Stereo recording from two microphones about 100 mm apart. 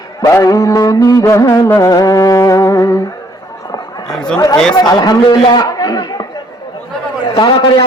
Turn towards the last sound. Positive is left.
turn(degrees=50)  # may be behind; listen again after turning